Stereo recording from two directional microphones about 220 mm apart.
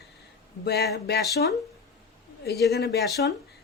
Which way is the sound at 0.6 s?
45° left (ahead or behind).